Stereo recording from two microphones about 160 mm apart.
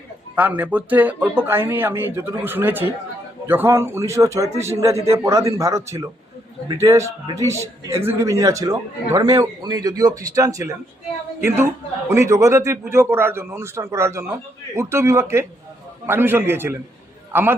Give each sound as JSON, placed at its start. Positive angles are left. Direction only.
{"t": 0.3, "sound": "a man's voice", "side_deg": -10}